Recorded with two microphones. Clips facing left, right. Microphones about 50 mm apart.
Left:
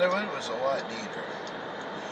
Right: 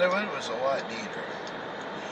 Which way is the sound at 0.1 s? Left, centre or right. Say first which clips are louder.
Right 1 dB; right.